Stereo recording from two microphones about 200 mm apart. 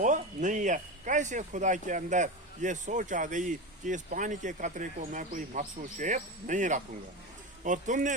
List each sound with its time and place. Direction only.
0.0 s speech: 40° right (ahead or behind)